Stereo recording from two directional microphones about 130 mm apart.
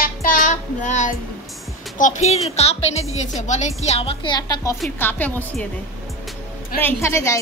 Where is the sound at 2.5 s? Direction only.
55° left (ahead or behind); by 4.7 s 30° left (ahead or behind).